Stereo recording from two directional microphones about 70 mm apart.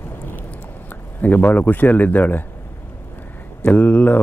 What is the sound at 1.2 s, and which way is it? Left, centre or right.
Speech, left.